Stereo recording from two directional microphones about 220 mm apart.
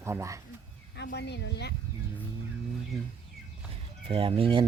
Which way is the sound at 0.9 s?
50° left (ahead or behind).